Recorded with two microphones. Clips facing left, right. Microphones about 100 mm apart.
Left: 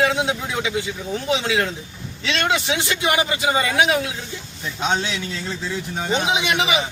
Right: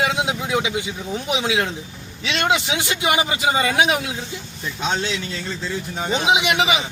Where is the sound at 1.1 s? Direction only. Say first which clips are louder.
Left 1 dB; 20° right (ahead or behind).